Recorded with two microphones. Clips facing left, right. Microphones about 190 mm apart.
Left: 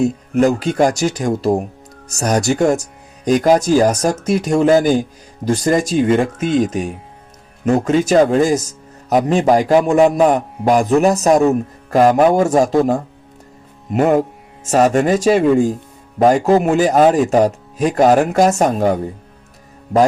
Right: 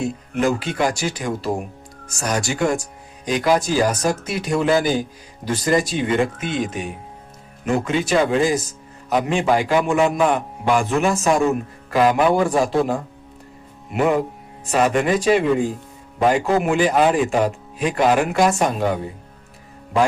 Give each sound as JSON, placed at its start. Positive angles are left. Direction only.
{"t": 0.0, "sound": "speech", "side_deg": 45}